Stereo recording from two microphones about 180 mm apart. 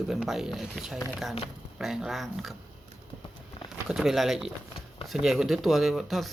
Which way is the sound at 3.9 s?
Centre (ahead or behind).